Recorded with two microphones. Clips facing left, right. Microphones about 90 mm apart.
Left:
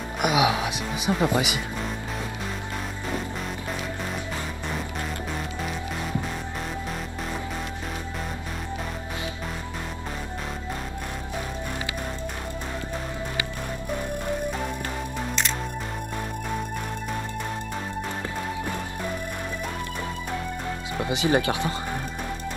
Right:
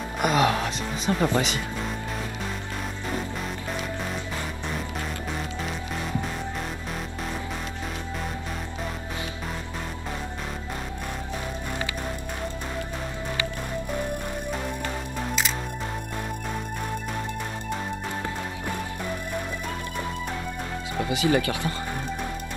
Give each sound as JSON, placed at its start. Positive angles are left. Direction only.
{"t": 0.2, "sound": "a woman's voice", "side_deg": 10}
{"t": 21.1, "sound": "speech", "side_deg": 25}